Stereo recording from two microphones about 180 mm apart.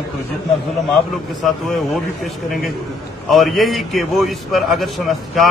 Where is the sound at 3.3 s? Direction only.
Centre (ahead or behind).